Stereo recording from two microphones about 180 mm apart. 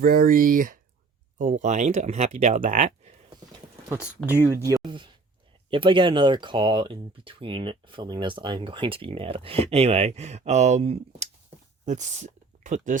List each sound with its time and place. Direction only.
0.0 s speech: 50° right (ahead or behind)
3.8 s speech: 5° right (ahead or behind)
4.6 s speech: 20° right (ahead or behind); by 13.0 s 45° right (ahead or behind)